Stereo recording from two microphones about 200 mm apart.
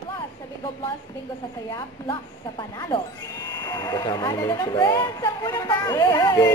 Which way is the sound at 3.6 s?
15° left (ahead or behind).